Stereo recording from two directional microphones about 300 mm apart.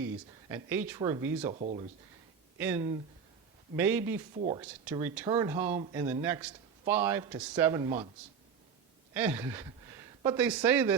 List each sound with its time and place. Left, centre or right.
0.4 s speech: centre
1.5 s speech: right
2.6 s speech: centre
4.4 s speech: centre
4.6 s speech: centre
9.1 s speech: centre